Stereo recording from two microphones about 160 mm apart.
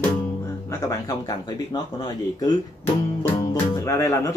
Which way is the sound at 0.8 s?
20° left (ahead or behind).